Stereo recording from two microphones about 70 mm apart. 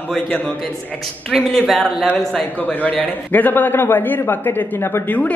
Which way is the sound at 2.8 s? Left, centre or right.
Left.